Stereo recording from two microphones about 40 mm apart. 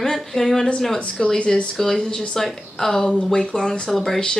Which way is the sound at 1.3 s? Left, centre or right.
Left.